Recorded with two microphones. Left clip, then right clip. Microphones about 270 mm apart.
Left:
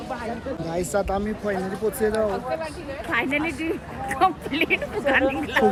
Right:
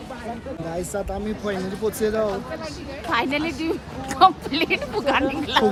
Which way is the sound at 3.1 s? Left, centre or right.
Right.